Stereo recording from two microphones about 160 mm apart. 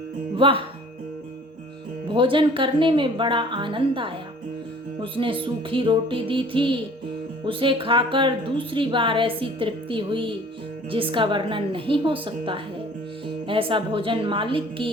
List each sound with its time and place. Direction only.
0.3 s speech: 30° right (ahead or behind)
2.0 s speech: 30° right (ahead or behind)